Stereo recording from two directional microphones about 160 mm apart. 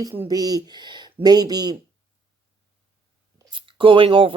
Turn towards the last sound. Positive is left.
turn(degrees=-35)  # may be behind; listen again after turning